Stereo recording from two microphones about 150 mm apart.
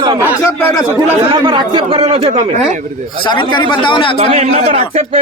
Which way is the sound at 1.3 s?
30° right (ahead or behind).